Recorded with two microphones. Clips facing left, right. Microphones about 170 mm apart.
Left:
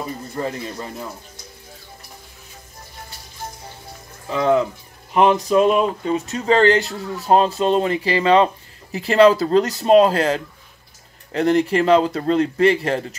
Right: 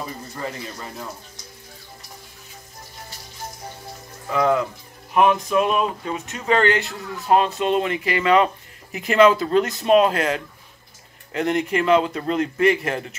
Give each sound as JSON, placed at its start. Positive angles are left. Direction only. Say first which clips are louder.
{"t": 4.3, "sound": "speech", "louder": "left 2 dB", "side_deg": 25}